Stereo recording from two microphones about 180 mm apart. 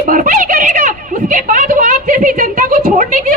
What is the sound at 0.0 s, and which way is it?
Speech, 50° right (ahead or behind).